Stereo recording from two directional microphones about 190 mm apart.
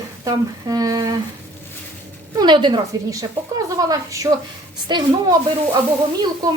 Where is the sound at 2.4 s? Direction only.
25° right (ahead or behind).